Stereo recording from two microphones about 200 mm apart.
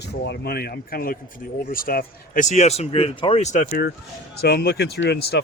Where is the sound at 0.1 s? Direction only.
55° left (ahead or behind).